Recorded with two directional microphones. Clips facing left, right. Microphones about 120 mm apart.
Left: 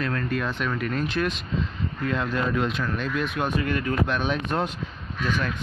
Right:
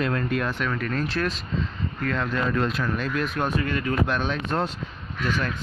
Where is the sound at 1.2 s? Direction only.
15° left (ahead or behind).